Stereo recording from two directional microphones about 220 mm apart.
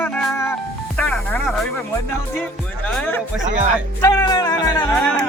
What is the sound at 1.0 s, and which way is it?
Speech, centre (ahead or behind).